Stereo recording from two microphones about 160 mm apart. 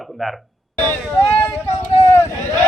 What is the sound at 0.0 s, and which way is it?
Music, centre (ahead or behind).